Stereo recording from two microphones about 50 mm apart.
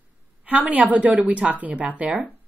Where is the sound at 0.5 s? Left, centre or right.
Right.